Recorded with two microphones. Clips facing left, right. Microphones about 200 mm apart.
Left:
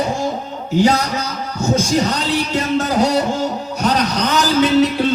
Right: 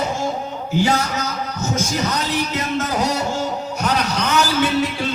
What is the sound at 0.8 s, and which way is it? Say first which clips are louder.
A man's voice: left 5 dB; 35° left (ahead or behind).